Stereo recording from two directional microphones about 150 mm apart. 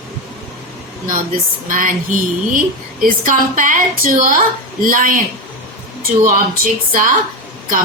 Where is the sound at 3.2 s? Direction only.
60° right (ahead or behind).